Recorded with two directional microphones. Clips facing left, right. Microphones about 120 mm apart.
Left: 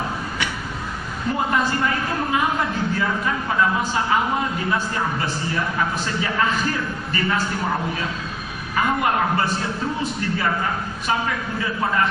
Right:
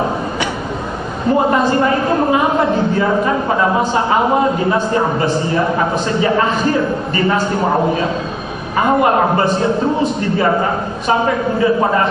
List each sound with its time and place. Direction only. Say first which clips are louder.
1.4 s a man's voice: right 8 dB; 30° right (ahead or behind)